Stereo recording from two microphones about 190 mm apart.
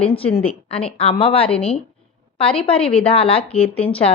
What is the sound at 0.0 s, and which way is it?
A woman's voice, 30° left (ahead or behind).